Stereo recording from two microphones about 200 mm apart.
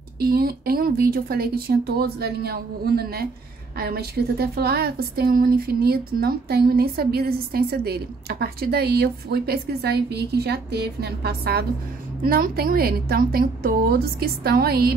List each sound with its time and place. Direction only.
0.2 s a woman's voice: 50° right (ahead or behind)